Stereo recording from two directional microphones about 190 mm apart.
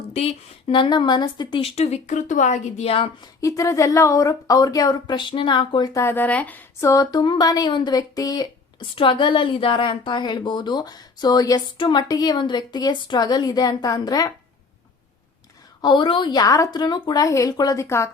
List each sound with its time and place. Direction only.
0.1 s a woman's voice: 30° left (ahead or behind)
15.8 s a woman's voice: 25° left (ahead or behind)